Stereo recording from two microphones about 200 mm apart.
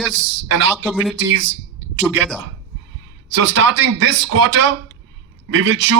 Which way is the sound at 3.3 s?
70° right (ahead or behind).